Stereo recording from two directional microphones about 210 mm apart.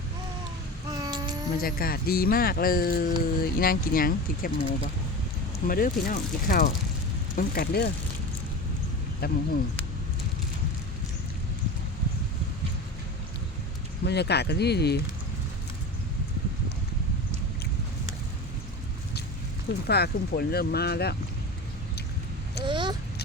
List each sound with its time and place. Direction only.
0.9 s a sound: 20° right (ahead or behind)
1.6 s speech: 45° left (ahead or behind)
9.2 s speech: 50° left (ahead or behind)
14.0 s speech: 50° left (ahead or behind)
19.9 s speech: 50° left (ahead or behind)
22.6 s speech: 20° right (ahead or behind)